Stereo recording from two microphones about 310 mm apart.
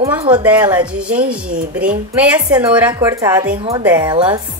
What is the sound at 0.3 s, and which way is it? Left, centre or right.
A woman's voice, centre.